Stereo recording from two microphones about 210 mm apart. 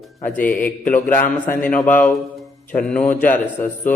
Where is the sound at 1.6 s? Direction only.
10° left (ahead or behind).